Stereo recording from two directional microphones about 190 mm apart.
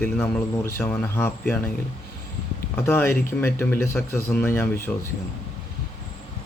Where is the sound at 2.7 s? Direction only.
10° left (ahead or behind).